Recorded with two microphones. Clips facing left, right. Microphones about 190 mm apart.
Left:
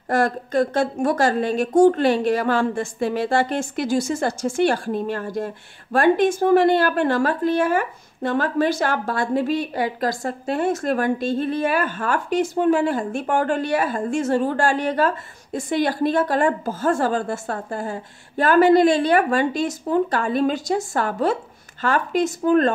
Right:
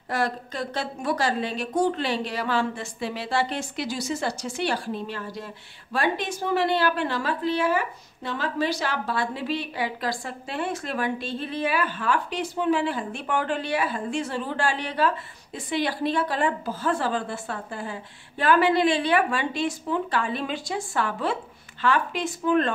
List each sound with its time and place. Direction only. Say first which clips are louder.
0.1 s a woman's voice: left 8 dB; 50° left (ahead or behind)